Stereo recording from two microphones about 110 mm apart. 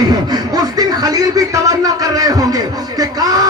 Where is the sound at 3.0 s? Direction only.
35° right (ahead or behind).